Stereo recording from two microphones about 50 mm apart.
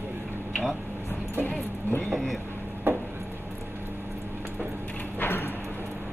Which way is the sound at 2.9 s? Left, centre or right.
Right.